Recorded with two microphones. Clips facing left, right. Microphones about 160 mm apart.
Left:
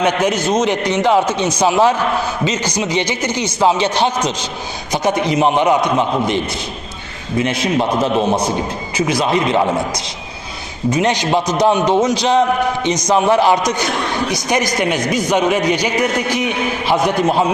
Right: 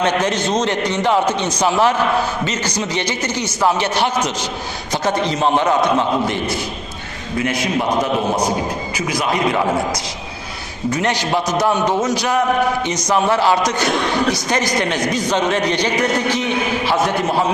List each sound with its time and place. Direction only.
0.0 s a man's voice: 10° left (ahead or behind)
9.0 s a man's voice: 25° left (ahead or behind)
10.9 s a man's voice: 20° left (ahead or behind)